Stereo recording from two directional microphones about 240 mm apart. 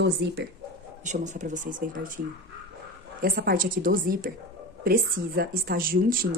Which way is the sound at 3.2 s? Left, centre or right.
Right.